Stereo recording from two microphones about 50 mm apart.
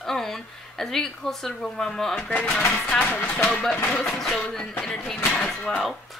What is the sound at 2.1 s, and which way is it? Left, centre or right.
Speech, left.